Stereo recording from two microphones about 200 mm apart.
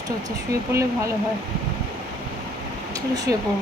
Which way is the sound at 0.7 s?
15° right (ahead or behind).